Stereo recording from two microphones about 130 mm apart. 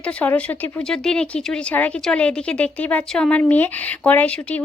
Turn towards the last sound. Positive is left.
turn(degrees=10)  # may be behind; listen again after turning